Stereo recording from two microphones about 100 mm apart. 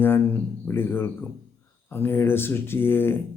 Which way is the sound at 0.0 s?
20° left (ahead or behind).